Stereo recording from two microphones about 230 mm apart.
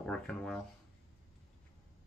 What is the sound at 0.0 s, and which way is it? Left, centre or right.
Speech, centre.